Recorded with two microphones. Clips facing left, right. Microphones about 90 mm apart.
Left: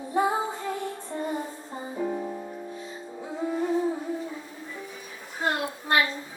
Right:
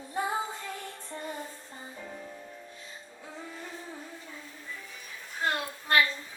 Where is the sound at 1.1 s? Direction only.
20° left (ahead or behind).